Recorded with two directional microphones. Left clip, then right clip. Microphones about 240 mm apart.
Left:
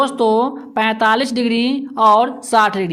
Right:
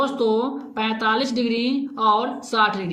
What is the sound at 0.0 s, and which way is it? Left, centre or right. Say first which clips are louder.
A woman's voice: left 6 dB; left.